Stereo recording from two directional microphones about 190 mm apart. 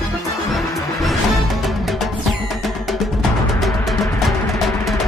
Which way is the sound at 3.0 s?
Centre (ahead or behind).